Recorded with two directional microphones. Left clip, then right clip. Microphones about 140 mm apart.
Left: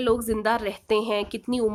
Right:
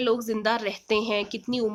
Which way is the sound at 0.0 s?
30° left (ahead or behind).